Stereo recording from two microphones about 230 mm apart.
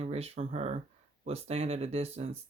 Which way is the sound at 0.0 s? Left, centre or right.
Right.